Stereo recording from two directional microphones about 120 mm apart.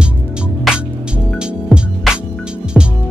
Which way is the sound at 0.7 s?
Centre (ahead or behind).